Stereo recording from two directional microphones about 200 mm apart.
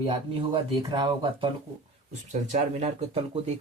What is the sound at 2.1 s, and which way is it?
Speech, 35° right (ahead or behind).